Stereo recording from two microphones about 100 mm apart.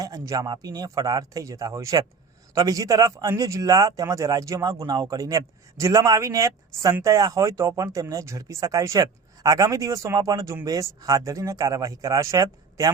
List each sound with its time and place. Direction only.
0.0 s speech: 35° right (ahead or behind)